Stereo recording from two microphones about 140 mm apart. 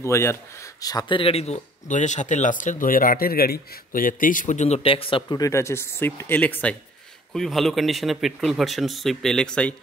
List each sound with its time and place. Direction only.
0.0 s speech: 20° left (ahead or behind); by 5.2 s 40° left (ahead or behind)
5.3 s speech: 20° left (ahead or behind); by 9.8 s 5° left (ahead or behind)